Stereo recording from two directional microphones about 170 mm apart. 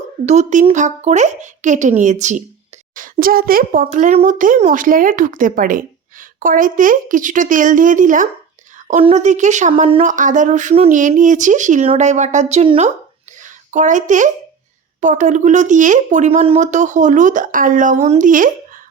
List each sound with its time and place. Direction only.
0.3 s a child's voice: 40° right (ahead or behind)
3.8 s speech: 45° right (ahead or behind)
8.9 s speech: 40° right (ahead or behind)
10.0 s speech: 50° right (ahead or behind)
13.4 s a woman's voice: 50° right (ahead or behind)